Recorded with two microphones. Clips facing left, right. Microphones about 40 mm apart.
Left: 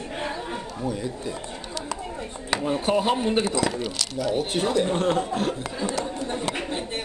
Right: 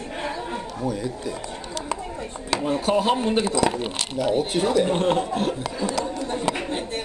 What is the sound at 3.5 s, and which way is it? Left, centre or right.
Speech, right.